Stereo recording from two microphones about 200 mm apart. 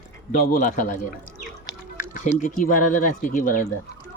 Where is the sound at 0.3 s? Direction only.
40° left (ahead or behind).